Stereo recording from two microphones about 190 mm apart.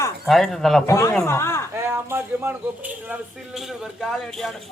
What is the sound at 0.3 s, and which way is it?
Speech, centre (ahead or behind).